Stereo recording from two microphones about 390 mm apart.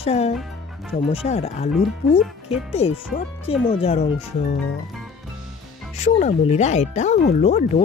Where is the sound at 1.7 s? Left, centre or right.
Centre.